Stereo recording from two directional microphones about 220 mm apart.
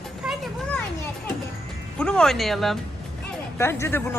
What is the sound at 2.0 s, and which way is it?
Speech, 5° left (ahead or behind).